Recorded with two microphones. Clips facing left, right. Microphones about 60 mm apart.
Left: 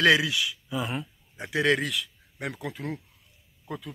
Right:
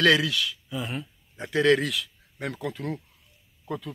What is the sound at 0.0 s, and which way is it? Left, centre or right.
Speech, centre.